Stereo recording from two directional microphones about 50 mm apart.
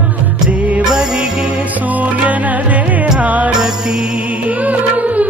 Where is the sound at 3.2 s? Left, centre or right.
Right.